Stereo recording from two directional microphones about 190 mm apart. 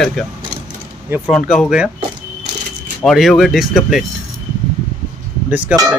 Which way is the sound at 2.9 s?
Centre (ahead or behind).